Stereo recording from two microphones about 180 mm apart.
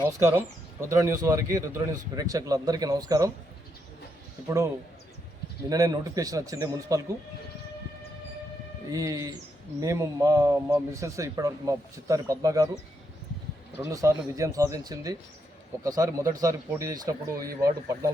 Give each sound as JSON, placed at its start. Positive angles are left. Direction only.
{"t": 0.2, "sound": "a man's voice", "side_deg": -20}
{"t": 4.4, "sound": "speech", "side_deg": -15}
{"t": 8.9, "sound": "a man's voice", "side_deg": -20}
{"t": 13.7, "sound": "a man's voice", "side_deg": -15}